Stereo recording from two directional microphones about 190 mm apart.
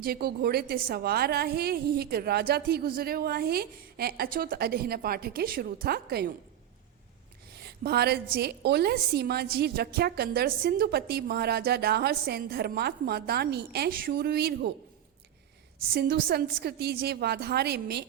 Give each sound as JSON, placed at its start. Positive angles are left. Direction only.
{"t": 0.0, "sound": "a woman's voice", "side_deg": -55}
{"t": 7.6, "sound": "a woman's voice", "side_deg": -60}
{"t": 15.8, "sound": "a woman's voice", "side_deg": -55}